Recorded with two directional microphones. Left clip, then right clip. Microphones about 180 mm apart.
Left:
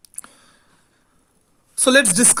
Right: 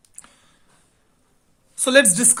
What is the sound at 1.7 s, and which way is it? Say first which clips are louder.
Speech: left 1 dB; 30° left (ahead or behind).